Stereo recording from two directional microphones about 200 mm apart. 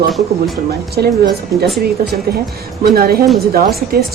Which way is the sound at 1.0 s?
55° right (ahead or behind).